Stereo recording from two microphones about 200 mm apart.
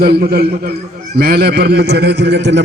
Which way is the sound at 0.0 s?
50° right (ahead or behind).